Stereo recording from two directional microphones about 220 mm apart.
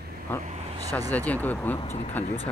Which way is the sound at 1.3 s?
10° left (ahead or behind).